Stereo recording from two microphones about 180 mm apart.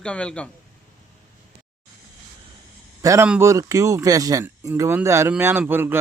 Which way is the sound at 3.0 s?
15° right (ahead or behind).